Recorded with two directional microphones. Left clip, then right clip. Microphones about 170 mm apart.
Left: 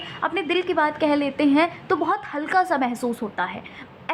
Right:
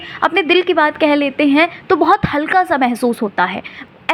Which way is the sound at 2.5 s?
15° right (ahead or behind).